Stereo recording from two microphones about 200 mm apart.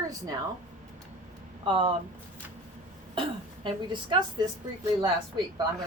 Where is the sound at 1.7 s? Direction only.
25° right (ahead or behind).